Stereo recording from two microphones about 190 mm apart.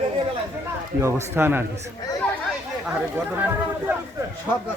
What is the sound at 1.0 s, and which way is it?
Speech, 10° right (ahead or behind).